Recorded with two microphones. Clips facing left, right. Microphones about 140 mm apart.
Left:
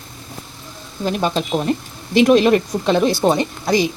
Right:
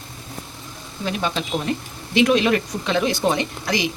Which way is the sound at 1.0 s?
45° left (ahead or behind).